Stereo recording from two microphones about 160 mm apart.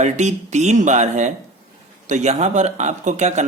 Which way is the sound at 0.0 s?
45° right (ahead or behind).